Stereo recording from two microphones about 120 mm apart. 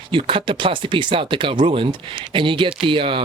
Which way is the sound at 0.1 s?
45° right (ahead or behind).